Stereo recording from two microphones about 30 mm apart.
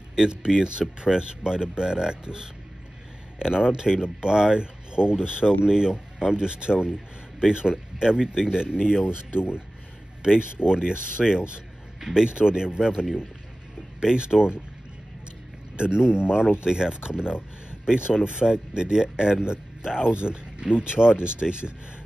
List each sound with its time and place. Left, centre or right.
0.6 s speech: right
10.6 s speech: right
14.1 s speech: right
15.7 s speech: right
20.2 s speech: right